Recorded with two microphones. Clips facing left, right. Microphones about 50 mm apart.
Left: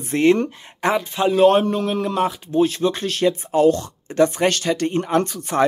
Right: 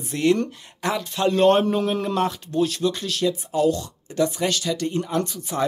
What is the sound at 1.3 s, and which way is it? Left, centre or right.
A man's voice, centre.